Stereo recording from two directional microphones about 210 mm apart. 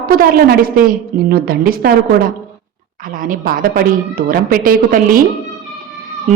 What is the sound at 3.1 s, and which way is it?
Speech, 40° right (ahead or behind).